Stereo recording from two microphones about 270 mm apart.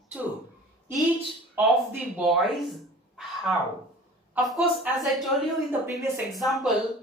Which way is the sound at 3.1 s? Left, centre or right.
Centre.